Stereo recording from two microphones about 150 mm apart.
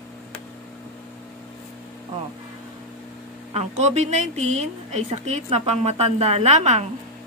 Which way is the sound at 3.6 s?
45° right (ahead or behind).